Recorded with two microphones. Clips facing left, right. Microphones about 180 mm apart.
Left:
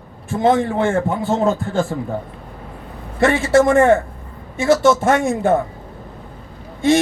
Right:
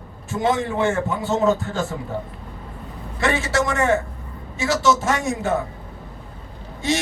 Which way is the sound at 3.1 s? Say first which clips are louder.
Left 8 dB; 55° left (ahead or behind).